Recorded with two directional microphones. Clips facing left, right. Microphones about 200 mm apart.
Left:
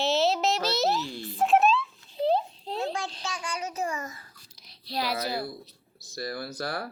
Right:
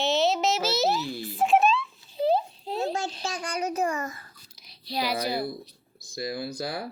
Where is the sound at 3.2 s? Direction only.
40° right (ahead or behind).